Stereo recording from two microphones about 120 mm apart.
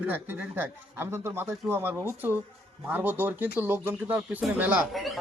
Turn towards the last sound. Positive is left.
turn(degrees=0)  # may be behind; listen again after turning